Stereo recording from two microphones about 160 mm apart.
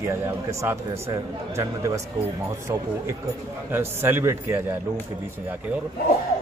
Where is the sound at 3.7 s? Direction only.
15° right (ahead or behind).